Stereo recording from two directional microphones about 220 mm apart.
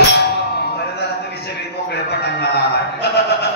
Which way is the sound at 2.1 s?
50° left (ahead or behind).